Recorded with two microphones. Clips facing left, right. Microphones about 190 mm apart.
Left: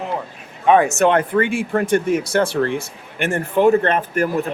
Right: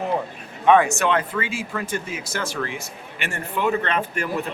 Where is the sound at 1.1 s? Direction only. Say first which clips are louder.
Left 7 dB; 60° left (ahead or behind).